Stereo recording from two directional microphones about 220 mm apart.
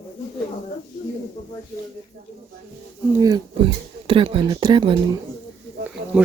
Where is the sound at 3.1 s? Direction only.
15° right (ahead or behind).